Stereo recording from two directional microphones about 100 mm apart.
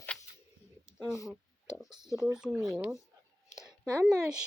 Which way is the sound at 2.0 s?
5° right (ahead or behind).